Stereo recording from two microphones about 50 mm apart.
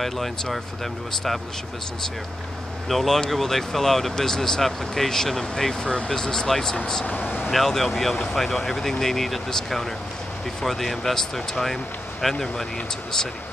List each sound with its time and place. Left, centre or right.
0.0 s speech: centre
2.9 s speech: centre
7.1 s speech: left
7.4 s speech: centre